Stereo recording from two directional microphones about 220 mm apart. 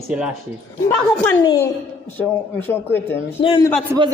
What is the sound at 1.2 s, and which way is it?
Speech, 15° left (ahead or behind).